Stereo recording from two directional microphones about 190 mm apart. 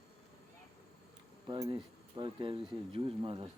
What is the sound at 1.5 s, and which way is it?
Speech, 25° right (ahead or behind).